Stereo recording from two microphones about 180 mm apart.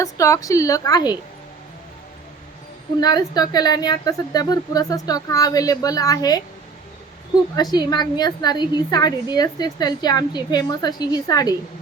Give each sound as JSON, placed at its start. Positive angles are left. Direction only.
{"t": 0.0, "sound": "a woman's voice", "side_deg": 15}
{"t": 3.0, "sound": "a woman's voice", "side_deg": 20}
{"t": 7.5, "sound": "a woman's voice", "side_deg": 20}